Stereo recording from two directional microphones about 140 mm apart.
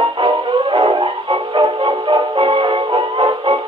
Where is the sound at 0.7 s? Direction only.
30° right (ahead or behind).